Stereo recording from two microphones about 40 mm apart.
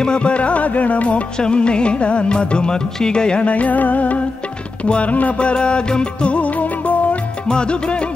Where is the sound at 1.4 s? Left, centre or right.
Left.